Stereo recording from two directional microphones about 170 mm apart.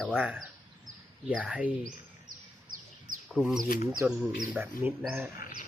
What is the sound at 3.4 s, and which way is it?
Speech, centre (ahead or behind).